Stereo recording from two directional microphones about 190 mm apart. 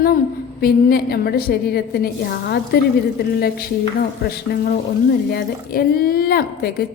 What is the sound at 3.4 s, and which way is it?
A woman's voice, 55° left (ahead or behind).